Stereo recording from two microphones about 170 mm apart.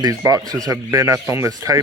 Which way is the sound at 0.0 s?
20° right (ahead or behind).